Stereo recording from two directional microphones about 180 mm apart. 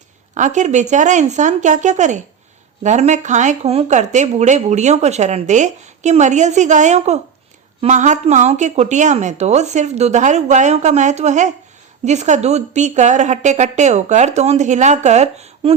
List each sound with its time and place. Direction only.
0.3 s speech: 40° right (ahead or behind)